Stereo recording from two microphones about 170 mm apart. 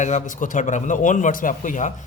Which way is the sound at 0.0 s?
45° left (ahead or behind).